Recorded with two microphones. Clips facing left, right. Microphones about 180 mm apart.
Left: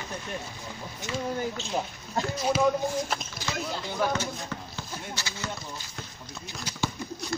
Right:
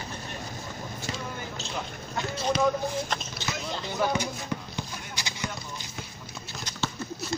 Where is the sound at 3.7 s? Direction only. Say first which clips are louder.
Right 2 dB; 5° right (ahead or behind).